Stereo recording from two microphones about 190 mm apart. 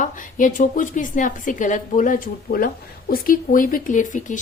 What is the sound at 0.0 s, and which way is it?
A woman's voice, 45° left (ahead or behind).